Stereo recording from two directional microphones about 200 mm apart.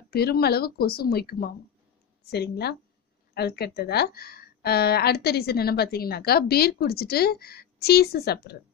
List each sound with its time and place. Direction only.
0.1 s a woman's voice: 50° left (ahead or behind)